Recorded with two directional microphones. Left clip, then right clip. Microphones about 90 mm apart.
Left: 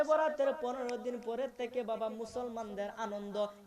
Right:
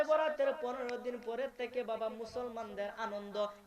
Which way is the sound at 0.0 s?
40° left (ahead or behind).